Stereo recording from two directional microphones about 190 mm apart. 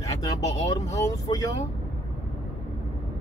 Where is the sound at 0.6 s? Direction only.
20° left (ahead or behind).